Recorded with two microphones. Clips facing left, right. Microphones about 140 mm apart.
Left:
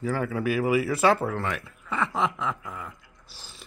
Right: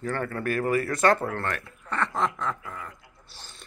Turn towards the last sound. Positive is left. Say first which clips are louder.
# right 1 dB
turn(degrees=0)  # may be behind; listen again after turning